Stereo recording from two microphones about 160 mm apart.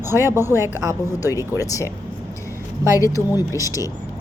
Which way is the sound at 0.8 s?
20° right (ahead or behind).